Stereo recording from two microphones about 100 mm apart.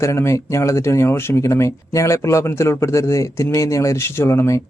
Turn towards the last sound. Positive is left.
turn(degrees=30)  # may be behind; listen again after turning